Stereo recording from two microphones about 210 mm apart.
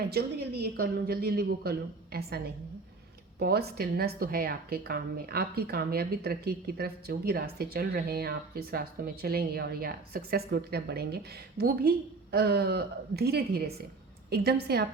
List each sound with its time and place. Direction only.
0.1 s a woman's voice: 50° right (ahead or behind)
3.3 s a woman's voice: 50° right (ahead or behind)